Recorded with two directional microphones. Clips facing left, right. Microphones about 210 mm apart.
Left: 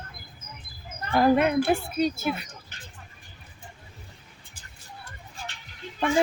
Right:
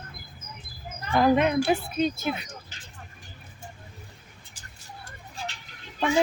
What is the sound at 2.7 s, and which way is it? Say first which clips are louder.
Vehicle: left 2 dB; 55° left (ahead or behind).